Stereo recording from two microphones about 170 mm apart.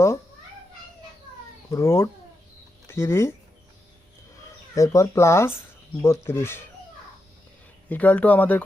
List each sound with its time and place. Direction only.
1.7 s speech: 15° left (ahead or behind)
4.7 s speech: 20° left (ahead or behind)
7.9 s speech: 10° left (ahead or behind)